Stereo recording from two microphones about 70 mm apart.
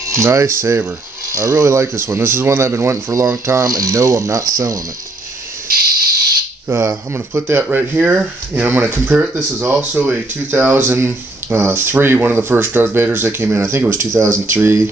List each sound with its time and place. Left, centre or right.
0.1 s speech: right
3.6 s speech: right
6.7 s speech: right
7.6 s speech: right